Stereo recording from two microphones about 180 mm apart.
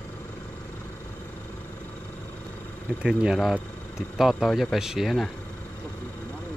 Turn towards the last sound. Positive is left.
turn(degrees=0)  # may be behind; listen again after turning